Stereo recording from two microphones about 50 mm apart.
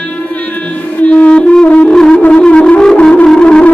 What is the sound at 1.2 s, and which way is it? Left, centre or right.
Music, left.